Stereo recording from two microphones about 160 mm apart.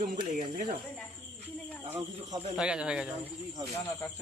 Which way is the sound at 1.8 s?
40° right (ahead or behind).